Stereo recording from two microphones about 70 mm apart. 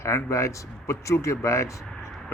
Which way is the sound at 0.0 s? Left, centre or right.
Left.